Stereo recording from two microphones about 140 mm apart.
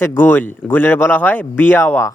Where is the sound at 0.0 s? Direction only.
15° left (ahead or behind).